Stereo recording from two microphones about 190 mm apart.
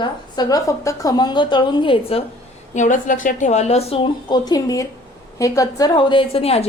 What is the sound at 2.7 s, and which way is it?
A woman's voice, 40° left (ahead or behind).